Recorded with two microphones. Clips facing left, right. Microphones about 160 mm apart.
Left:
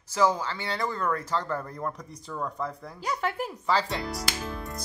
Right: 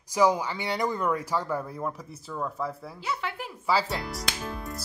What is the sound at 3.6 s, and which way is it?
Speech, 5° right (ahead or behind).